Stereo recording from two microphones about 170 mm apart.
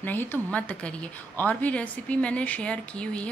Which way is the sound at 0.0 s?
10° left (ahead or behind).